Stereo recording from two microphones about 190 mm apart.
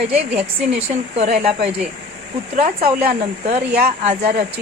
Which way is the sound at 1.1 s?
35° right (ahead or behind).